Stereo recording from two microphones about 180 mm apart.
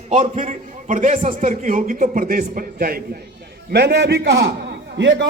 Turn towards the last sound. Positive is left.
turn(degrees=-80)